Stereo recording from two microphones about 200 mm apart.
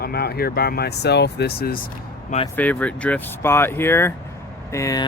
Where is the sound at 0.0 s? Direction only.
50° left (ahead or behind).